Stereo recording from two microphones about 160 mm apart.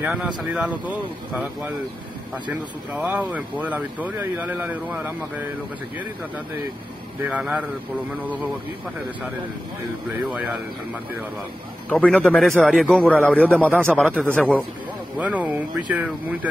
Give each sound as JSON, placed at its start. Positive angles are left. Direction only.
{"t": 0.0, "sound": "speech", "side_deg": -5}
{"t": 7.2, "sound": "speech", "side_deg": -10}
{"t": 11.9, "sound": "a man's voice", "side_deg": 10}
{"t": 15.1, "sound": "speech", "side_deg": -10}